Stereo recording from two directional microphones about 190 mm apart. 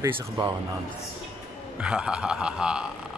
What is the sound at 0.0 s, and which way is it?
Speech, 20° right (ahead or behind).